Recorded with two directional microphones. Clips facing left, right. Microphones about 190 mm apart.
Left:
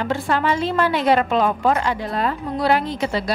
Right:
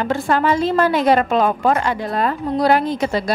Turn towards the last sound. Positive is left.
turn(degrees=-45)  # may be behind; listen again after turning